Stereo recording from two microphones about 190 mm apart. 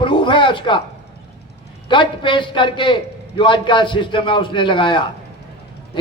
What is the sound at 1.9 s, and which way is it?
A man's voice, 25° left (ahead or behind).